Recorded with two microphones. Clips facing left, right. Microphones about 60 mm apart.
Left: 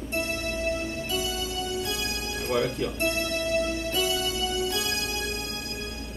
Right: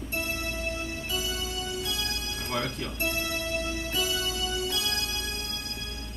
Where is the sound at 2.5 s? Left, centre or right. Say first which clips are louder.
Left 6 dB; centre.